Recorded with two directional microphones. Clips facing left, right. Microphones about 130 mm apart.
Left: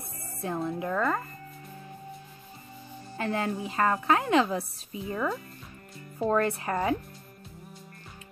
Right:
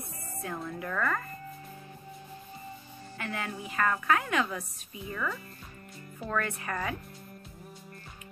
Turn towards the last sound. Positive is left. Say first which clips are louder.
# left 6 dB
turn(degrees=30)  # may be behind; listen again after turning